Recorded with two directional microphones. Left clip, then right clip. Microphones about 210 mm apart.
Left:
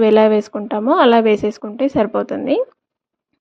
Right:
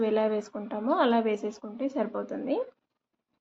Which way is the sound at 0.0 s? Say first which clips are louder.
Left 15 dB; 40° left (ahead or behind).